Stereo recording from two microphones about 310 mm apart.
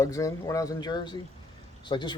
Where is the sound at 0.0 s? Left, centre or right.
Centre.